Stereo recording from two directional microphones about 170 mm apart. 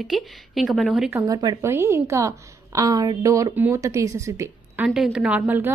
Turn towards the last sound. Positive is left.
turn(degrees=-10)  # may be behind; listen again after turning